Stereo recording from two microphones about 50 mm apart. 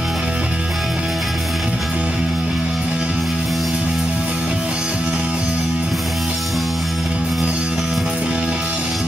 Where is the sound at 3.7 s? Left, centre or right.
Centre.